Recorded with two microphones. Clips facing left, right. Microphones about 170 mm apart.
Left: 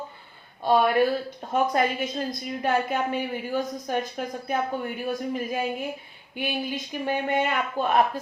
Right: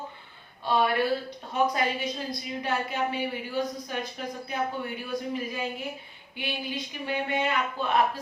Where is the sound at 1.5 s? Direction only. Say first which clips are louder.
Left 3 dB; 50° left (ahead or behind).